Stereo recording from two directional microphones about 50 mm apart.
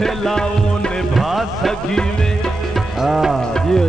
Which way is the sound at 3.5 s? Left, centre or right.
Centre.